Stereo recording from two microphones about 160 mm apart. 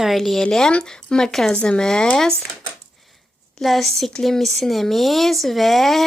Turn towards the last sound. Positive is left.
turn(degrees=0)  # may be behind; listen again after turning